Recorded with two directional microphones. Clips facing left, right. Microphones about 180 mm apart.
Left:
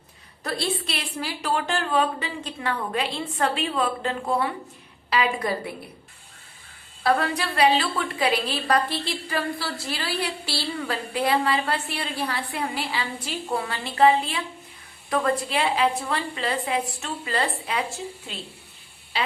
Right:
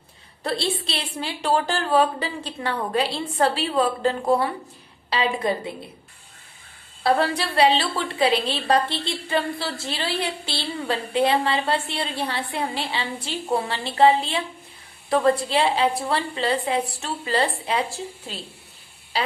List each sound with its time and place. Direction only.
0.4 s a woman's voice: 30° right (ahead or behind)
5.1 s a woman's voice: 25° right (ahead or behind)
7.0 s a woman's voice: 30° right (ahead or behind)